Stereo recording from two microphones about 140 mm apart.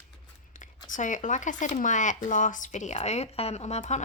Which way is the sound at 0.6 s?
65° left (ahead or behind).